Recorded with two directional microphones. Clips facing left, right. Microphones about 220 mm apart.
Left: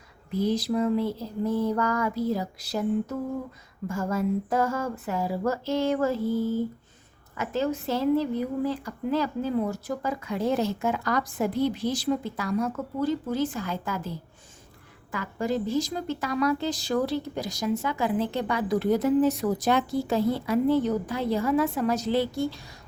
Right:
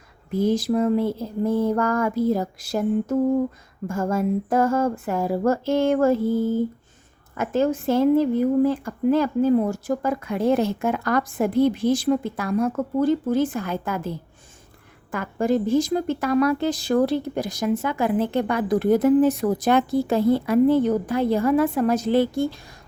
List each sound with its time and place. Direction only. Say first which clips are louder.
0.3 s speech: right 5 dB; 50° right (ahead or behind)
15.1 s a woman's voice: right 6 dB; 50° right (ahead or behind)